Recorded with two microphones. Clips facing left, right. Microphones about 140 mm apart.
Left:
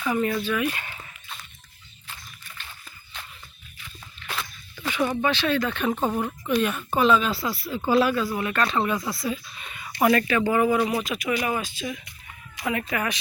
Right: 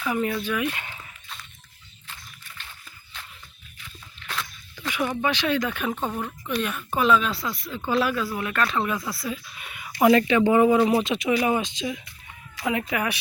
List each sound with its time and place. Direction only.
0.0 s speech: 10° right (ahead or behind)
4.3 s walk: 5° left (ahead or behind)
4.9 s speech: 10° right (ahead or behind)
5.9 s speech: 5° left (ahead or behind)
10.0 s speech: 20° right (ahead or behind)